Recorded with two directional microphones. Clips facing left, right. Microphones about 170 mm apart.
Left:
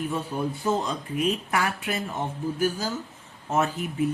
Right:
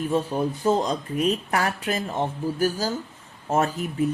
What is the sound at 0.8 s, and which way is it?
Speech, 40° right (ahead or behind).